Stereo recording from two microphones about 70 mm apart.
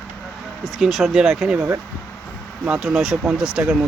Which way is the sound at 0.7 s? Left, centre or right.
Centre.